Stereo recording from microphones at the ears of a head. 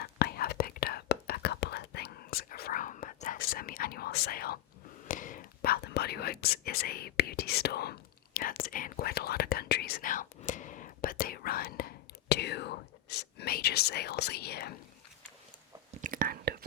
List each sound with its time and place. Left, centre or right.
0.0 s whispering: left
15.9 s whispering: right